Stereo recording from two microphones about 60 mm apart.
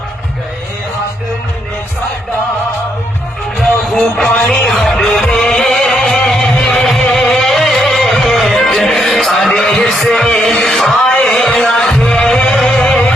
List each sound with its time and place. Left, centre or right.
3.9 s music: left
4.4 s music: centre
9.6 s a sound: centre
10.2 s music: centre